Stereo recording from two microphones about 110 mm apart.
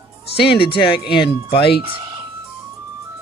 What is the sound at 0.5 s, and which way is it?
Speech, 50° left (ahead or behind).